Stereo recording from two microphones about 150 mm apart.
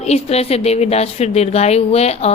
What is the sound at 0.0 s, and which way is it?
A woman's voice, 45° left (ahead or behind).